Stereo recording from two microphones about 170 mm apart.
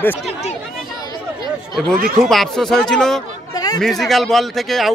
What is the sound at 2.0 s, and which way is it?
Speech, 60° right (ahead or behind).